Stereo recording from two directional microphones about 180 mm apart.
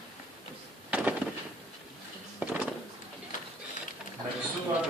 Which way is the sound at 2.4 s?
10° right (ahead or behind).